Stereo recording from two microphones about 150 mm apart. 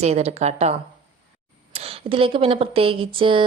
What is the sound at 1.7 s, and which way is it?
Speech, 40° right (ahead or behind).